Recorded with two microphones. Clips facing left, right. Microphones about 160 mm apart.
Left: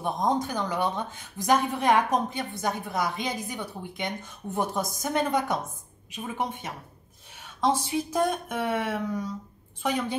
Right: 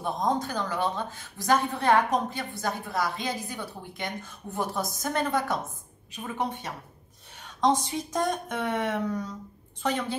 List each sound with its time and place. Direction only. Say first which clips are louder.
0.0 s a woman's voice: left 1 dB; 15° left (ahead or behind)